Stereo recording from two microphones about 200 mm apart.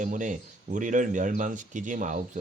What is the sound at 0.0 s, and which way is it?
Speech, 40° right (ahead or behind).